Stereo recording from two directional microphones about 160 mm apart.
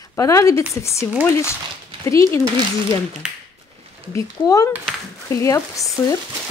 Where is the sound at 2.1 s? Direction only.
20° left (ahead or behind).